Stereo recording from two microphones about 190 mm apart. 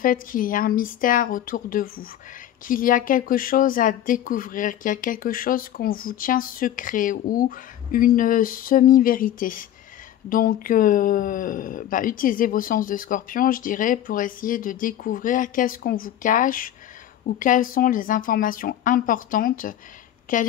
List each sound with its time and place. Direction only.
0.0 s speech: 45° left (ahead or behind)